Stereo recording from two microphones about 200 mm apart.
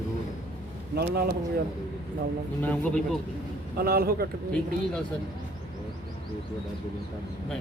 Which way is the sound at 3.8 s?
50° right (ahead or behind).